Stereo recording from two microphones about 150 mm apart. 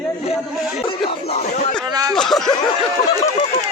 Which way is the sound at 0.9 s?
40° left (ahead or behind).